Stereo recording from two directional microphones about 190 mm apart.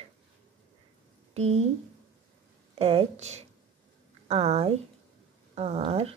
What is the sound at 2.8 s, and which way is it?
Speech, 30° right (ahead or behind).